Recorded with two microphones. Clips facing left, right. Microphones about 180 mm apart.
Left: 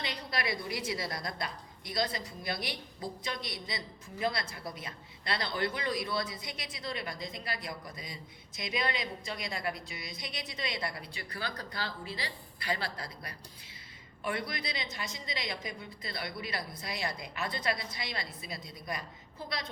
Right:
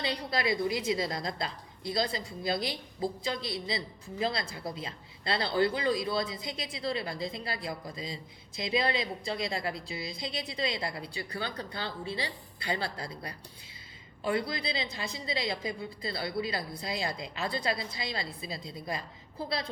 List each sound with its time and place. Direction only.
0.0 s a woman's voice: 30° right (ahead or behind)